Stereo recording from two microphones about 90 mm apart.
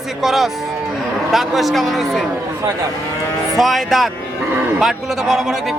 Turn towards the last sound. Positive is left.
turn(degrees=0)  # may be behind; listen again after turning